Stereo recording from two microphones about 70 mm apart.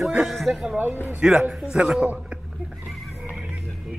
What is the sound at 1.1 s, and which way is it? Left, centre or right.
Speech, centre.